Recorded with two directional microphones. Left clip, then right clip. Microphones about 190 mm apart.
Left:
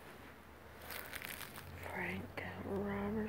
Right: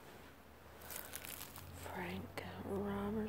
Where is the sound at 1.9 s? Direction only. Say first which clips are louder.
Left 3 dB; 15° right (ahead or behind).